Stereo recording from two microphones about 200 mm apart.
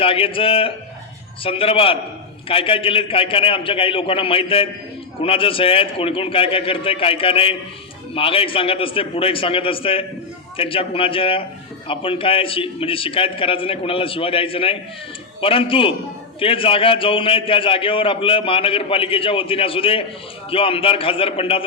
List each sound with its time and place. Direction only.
0.0 s a man's voice: 25° left (ahead or behind)